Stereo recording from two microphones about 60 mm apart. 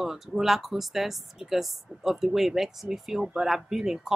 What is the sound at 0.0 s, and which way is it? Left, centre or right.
A woman's voice, centre.